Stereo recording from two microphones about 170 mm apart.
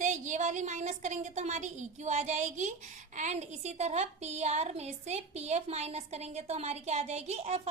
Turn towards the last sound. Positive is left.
turn(degrees=-40)  # may be behind; listen again after turning